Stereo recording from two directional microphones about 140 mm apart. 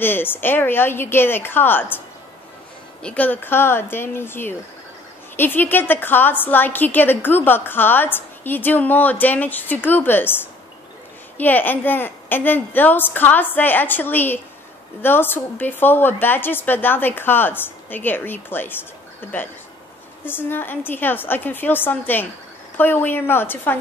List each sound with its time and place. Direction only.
0.0 s a woman's voice: 15° left (ahead or behind)
3.0 s a woman's voice: 10° left (ahead or behind)